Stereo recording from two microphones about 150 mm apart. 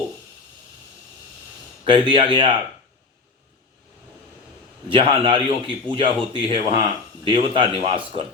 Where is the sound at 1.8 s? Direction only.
35° right (ahead or behind).